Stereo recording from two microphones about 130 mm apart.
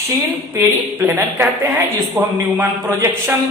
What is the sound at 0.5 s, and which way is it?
A man's voice, 20° right (ahead or behind).